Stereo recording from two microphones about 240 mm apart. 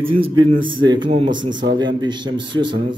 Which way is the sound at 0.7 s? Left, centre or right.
Centre.